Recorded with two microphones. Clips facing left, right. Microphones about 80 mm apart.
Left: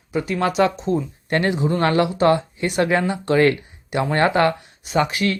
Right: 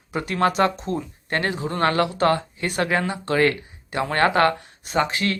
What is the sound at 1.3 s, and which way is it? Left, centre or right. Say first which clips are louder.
Speech: left 4 dB; right.